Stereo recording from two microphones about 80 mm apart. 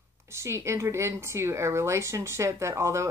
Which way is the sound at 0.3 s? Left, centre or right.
Right.